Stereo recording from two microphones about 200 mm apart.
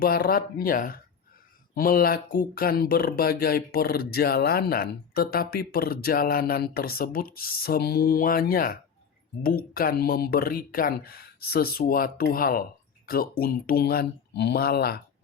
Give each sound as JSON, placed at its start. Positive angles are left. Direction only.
{"t": 0.0, "sound": "speech", "side_deg": 50}